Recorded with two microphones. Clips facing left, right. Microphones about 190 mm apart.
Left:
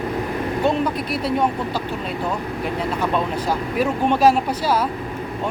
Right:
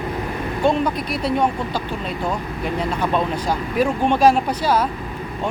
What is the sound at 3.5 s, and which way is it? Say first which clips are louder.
Speech: right 1 dB; 5° left (ahead or behind).